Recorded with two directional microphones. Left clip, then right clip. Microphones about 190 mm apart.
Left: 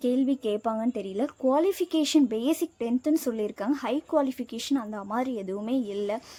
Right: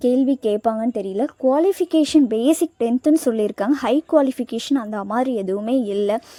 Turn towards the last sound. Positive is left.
turn(degrees=-35)  # may be behind; listen again after turning